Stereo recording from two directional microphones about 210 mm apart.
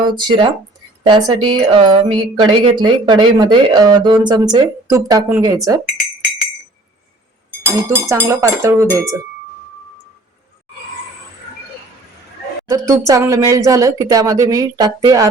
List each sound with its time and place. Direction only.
0.0 s speech: 20° right (ahead or behind)
7.9 s a woman's voice: 15° right (ahead or behind)
12.6 s a woman's voice: 15° right (ahead or behind)